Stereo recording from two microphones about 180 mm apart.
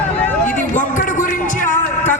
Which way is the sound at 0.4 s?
45° left (ahead or behind).